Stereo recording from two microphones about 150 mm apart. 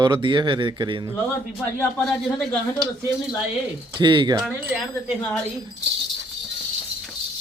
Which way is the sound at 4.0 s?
30° right (ahead or behind).